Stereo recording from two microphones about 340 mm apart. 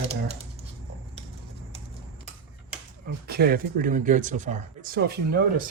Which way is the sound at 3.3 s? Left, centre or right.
Right.